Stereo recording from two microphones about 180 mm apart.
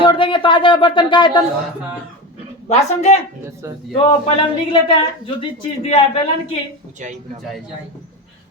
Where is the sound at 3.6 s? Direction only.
15° right (ahead or behind).